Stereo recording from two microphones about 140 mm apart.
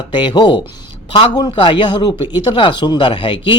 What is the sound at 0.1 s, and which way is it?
Speech, 35° left (ahead or behind).